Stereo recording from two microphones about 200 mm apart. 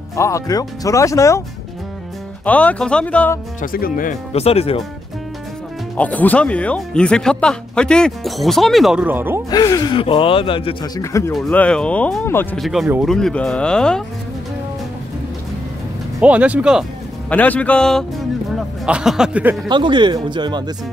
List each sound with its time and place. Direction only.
0.1 s speech: 15° left (ahead or behind)
2.4 s speech: 5° left (ahead or behind)
3.6 s speech: 45° left (ahead or behind)
4.3 s speech: 30° left (ahead or behind)
5.9 s speech: 10° left (ahead or behind); by 9.4 s 10° right (ahead or behind)
9.5 s speech: 20° left (ahead or behind)
11.3 s speech: 5° left (ahead or behind)
16.2 s speech: 5° right (ahead or behind)
17.3 s speech: 5° left (ahead or behind)
19.7 s speech: 25° right (ahead or behind)